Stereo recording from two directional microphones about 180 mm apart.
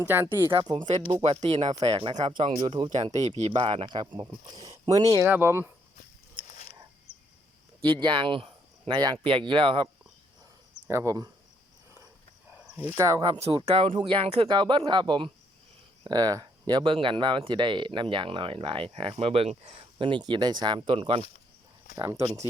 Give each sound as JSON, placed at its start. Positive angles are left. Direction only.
{"t": 0.0, "sound": "speech", "side_deg": -10}
{"t": 1.2, "sound": "speech", "side_deg": -35}
{"t": 1.9, "sound": "speech", "side_deg": -30}
{"t": 2.9, "sound": "speech", "side_deg": -40}
{"t": 7.1, "sound": "cricket", "side_deg": -65}
{"t": 7.9, "sound": "speech", "side_deg": -25}
{"t": 12.5, "sound": "a sound", "side_deg": -10}
{"t": 13.0, "sound": "speech", "side_deg": -20}
{"t": 21.9, "sound": "speech", "side_deg": -15}